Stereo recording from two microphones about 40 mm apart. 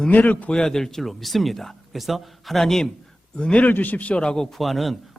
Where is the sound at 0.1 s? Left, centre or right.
Left.